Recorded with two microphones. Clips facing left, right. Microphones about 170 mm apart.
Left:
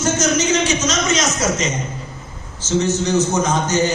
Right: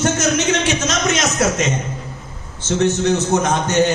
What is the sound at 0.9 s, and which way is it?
Speech, 60° right (ahead or behind).